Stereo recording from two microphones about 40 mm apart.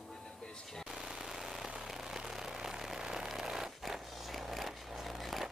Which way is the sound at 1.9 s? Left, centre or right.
Centre.